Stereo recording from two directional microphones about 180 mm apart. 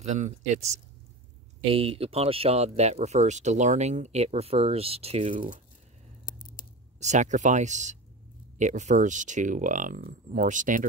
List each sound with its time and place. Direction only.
0.0 s speech: 40° right (ahead or behind)
6.2 s a sound: 50° left (ahead or behind)
7.0 s speech: 40° right (ahead or behind)